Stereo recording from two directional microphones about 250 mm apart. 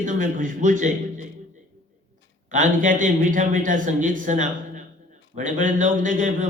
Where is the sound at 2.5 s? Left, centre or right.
Right.